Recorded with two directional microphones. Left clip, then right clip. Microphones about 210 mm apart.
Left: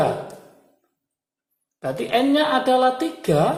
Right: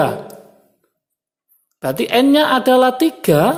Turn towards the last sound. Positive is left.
turn(degrees=-50)  # may be behind; listen again after turning